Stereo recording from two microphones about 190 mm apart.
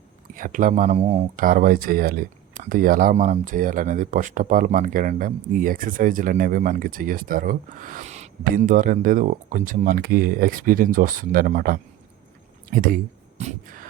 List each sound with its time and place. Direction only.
0.3 s speech: 45° right (ahead or behind)